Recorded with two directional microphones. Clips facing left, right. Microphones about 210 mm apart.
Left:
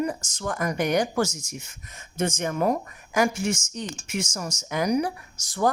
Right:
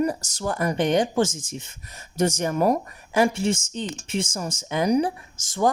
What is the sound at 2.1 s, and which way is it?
Speech, 40° right (ahead or behind).